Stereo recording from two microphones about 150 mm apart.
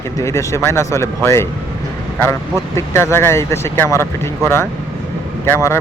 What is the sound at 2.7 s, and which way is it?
Speech, 15° left (ahead or behind).